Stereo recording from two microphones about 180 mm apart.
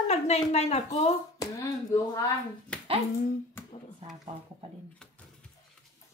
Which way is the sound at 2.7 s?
5° left (ahead or behind).